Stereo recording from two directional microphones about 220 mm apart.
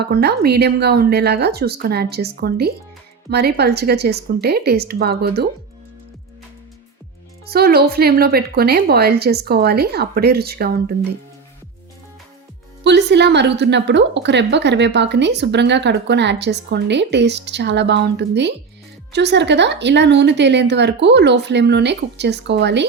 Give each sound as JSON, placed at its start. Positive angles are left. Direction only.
{"t": 0.0, "sound": "a woman's voice", "side_deg": -45}
{"t": 7.4, "sound": "a woman's voice", "side_deg": -45}
{"t": 12.8, "sound": "a woman's voice", "side_deg": -50}